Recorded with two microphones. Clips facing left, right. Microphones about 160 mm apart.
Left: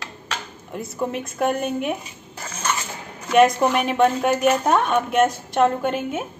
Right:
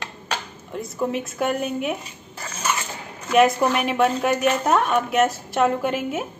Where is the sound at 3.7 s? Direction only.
5° right (ahead or behind).